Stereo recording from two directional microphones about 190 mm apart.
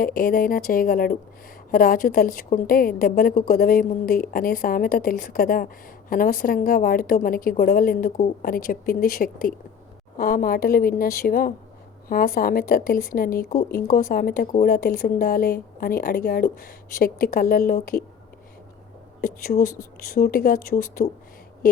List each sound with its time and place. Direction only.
0.0 s a woman's voice: 50° left (ahead or behind)
19.2 s a woman's voice: 45° left (ahead or behind)